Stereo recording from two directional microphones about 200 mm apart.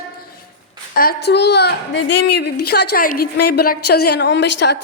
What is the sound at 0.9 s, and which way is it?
A woman's voice, 50° left (ahead or behind).